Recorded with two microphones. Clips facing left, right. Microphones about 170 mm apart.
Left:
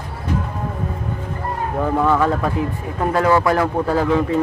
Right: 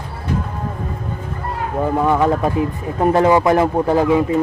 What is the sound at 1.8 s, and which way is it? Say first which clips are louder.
Speech: right 1 dB; 15° right (ahead or behind).